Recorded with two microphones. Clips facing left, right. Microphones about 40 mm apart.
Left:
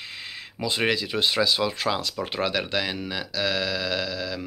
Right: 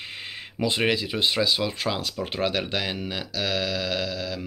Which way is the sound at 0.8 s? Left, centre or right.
Centre.